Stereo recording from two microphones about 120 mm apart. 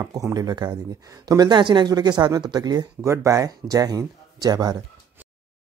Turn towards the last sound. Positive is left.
turn(degrees=-35)  # may be behind; listen again after turning